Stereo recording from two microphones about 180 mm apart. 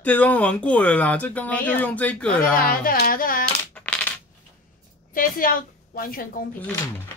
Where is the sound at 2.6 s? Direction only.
55° left (ahead or behind).